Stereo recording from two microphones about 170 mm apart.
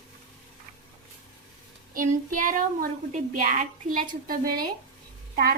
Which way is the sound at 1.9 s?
50° right (ahead or behind).